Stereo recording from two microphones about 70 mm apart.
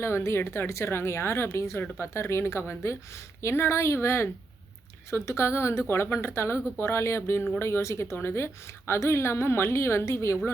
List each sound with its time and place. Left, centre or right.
0.0 s a woman's voice: left